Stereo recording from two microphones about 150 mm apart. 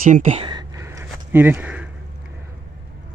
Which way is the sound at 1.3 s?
15° right (ahead or behind).